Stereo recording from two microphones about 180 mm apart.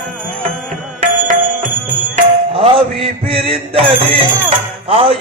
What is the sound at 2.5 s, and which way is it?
Music, 30° right (ahead or behind).